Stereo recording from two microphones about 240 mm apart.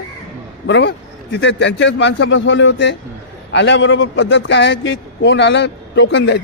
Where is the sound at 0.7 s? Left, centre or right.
Left.